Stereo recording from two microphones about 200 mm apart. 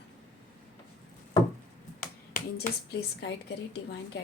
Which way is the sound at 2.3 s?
50° left (ahead or behind).